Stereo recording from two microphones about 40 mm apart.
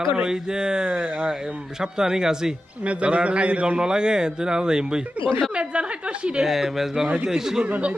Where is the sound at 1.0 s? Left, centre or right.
Right.